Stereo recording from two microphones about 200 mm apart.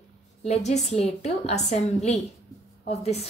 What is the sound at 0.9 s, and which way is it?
A woman's voice, 30° left (ahead or behind).